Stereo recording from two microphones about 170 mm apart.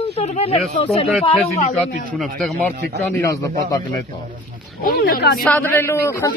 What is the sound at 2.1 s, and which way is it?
Speech, centre (ahead or behind).